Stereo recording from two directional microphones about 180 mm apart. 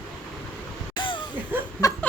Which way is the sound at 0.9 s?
25° left (ahead or behind).